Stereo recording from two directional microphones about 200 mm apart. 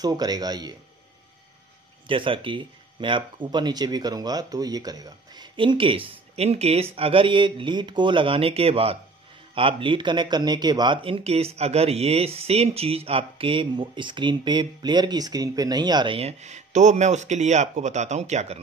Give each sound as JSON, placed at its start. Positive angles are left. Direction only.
{"t": 0.0, "sound": "speech", "side_deg": -20}
{"t": 2.0, "sound": "speech", "side_deg": -25}